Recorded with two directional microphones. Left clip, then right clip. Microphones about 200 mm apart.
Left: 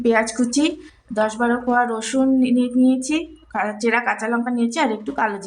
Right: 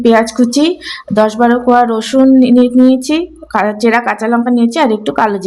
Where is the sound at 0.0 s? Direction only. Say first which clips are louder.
Right 9 dB; 35° right (ahead or behind).